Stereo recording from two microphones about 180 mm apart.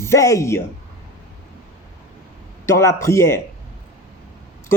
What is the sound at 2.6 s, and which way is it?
Speech, 15° left (ahead or behind).